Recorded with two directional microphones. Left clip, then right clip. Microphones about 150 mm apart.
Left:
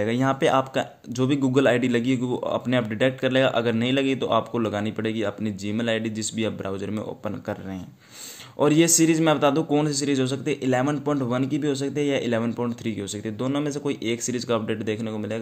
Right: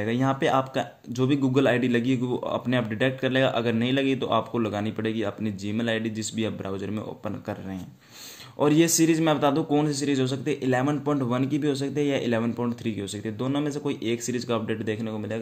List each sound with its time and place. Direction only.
0.0 s speech: 25° left (ahead or behind)
8.5 s speech: 25° left (ahead or behind)